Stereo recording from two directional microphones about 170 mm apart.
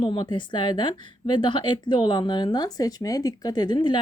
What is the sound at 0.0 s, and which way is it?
A woman's voice, 30° left (ahead or behind).